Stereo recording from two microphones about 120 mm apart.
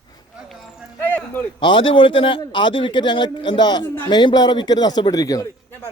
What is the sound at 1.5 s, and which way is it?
A man's voice, 45° left (ahead or behind).